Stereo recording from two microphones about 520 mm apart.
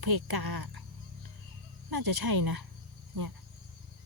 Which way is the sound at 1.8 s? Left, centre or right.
Right.